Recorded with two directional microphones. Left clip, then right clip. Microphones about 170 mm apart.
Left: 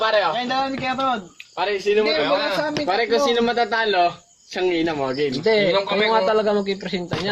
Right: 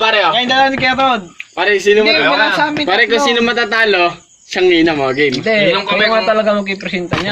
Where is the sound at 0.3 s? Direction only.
30° right (ahead or behind).